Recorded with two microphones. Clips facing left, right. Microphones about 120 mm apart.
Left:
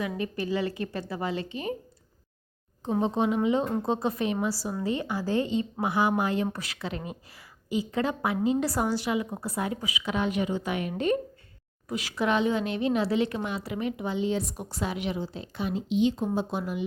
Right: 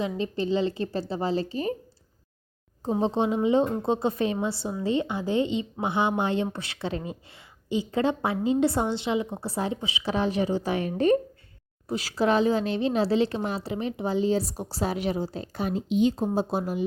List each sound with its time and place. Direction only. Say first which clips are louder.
0.0 s a woman's voice: right 3 dB; 25° right (ahead or behind)
3.0 s a woman's voice: right 1 dB; 30° right (ahead or behind)